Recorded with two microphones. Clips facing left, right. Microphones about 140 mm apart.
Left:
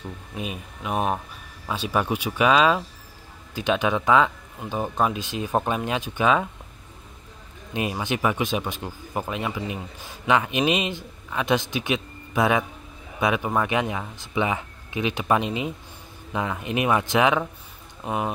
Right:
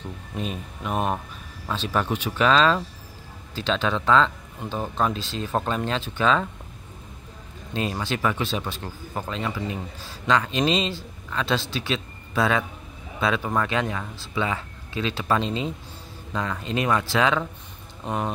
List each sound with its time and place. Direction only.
0.3 s speech: 5° left (ahead or behind)
7.7 s speech: 15° left (ahead or behind)
18.0 s speech: 5° left (ahead or behind)